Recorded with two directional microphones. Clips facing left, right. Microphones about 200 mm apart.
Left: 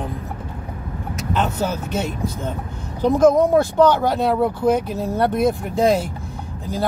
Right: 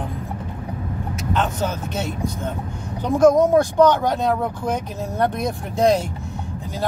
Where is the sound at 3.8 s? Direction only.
10° left (ahead or behind).